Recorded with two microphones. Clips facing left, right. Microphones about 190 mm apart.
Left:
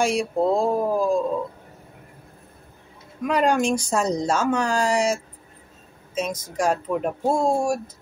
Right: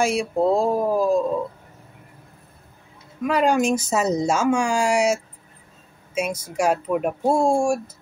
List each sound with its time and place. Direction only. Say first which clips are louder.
0.0 s speech: right 1 dB; 5° right (ahead or behind)
3.3 s speech: right 1 dB; 5° right (ahead or behind)